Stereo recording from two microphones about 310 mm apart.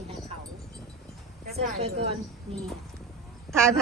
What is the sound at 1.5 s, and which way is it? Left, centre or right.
Speech, centre.